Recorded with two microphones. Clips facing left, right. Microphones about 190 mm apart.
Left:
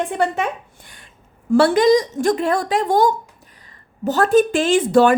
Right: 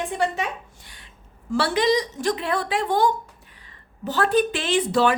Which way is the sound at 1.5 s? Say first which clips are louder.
Left 8 dB; 50° left (ahead or behind).